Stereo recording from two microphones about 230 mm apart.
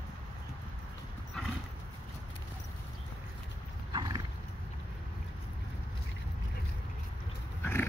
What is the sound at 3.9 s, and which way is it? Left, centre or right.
Horse, centre.